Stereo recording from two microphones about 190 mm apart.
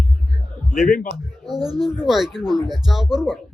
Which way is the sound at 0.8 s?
50° left (ahead or behind).